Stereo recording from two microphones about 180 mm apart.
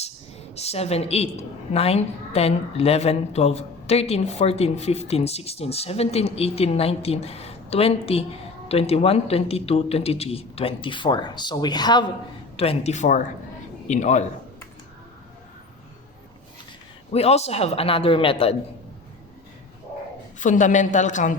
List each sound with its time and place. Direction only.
0.5 s a woman's voice: 35° left (ahead or behind)
12.5 s a woman's voice: 35° left (ahead or behind)
17.1 s a woman's voice: 35° left (ahead or behind)
20.4 s a woman's voice: 45° left (ahead or behind)